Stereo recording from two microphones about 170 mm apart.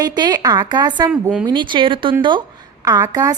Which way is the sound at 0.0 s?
25° right (ahead or behind).